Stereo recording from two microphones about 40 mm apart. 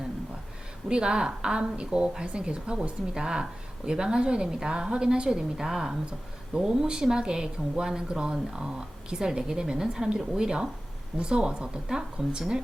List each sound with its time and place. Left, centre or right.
0.9 s speech: right